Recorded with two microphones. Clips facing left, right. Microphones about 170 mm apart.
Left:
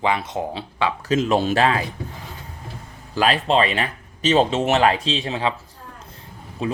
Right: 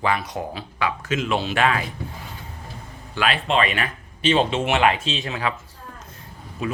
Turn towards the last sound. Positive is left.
turn(degrees=30)  # may be behind; listen again after turning